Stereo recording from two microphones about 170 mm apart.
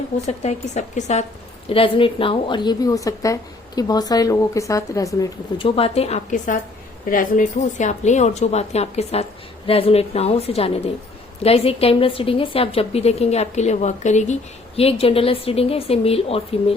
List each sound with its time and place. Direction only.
0.3 s a woman's voice: 40° left (ahead or behind)
1.7 s speech: 30° left (ahead or behind)
5.6 s a woman's voice: 35° left (ahead or behind)